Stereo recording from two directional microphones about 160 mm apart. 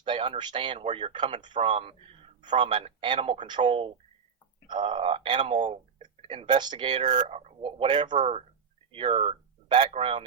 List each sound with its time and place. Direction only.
0.0 s speech: 30° right (ahead or behind)
7.1 s speech: 45° right (ahead or behind); by 8.2 s 30° right (ahead or behind)
8.2 s speech: 40° right (ahead or behind)